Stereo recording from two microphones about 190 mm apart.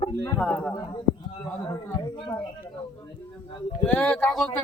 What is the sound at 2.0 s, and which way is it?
Speech, 20° left (ahead or behind).